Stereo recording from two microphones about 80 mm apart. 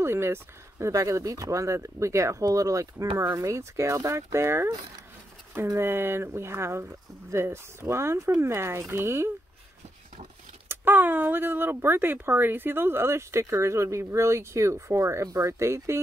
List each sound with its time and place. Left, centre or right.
0.0 s speech: right
5.8 s speech: right
10.7 s speech: right